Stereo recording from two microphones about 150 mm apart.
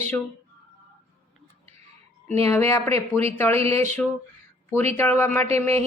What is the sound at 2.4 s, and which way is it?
A woman's voice, 20° left (ahead or behind).